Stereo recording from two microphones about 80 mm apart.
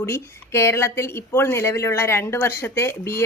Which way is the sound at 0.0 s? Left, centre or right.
Left.